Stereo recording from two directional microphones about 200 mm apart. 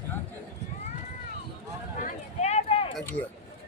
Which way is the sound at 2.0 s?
35° left (ahead or behind).